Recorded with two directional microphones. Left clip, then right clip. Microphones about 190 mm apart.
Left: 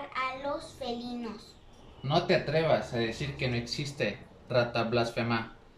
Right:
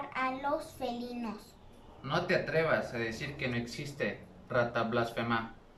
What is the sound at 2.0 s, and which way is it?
Speech, 25° left (ahead or behind).